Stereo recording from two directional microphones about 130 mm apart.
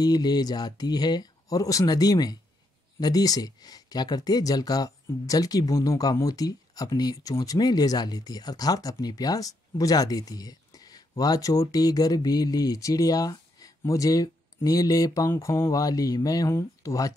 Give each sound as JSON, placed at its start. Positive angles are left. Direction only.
{"t": 0.0, "sound": "speech", "side_deg": 30}